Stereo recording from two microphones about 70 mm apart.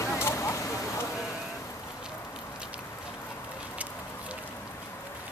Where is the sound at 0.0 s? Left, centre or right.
Left.